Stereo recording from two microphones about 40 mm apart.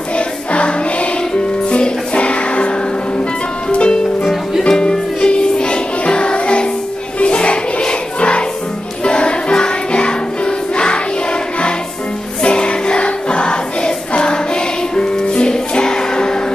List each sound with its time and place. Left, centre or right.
0.1 s choir: left
1.7 s music: left
3.7 s music: left
12.4 s music: left